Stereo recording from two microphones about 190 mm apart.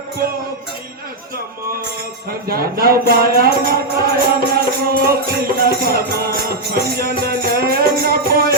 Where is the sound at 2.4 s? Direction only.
50° right (ahead or behind).